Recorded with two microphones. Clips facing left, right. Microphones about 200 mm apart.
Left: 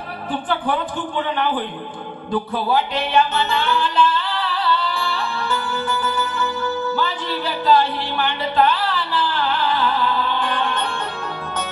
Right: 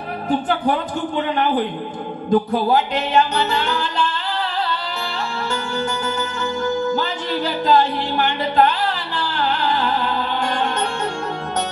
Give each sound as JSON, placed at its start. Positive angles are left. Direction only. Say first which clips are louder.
{"t": 0.3, "sound": "speech", "louder": "right 3 dB", "side_deg": -45}
{"t": 2.3, "sound": "music", "louder": "right 4 dB", "side_deg": -45}